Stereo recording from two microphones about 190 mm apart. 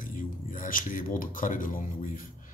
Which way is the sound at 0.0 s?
45° left (ahead or behind).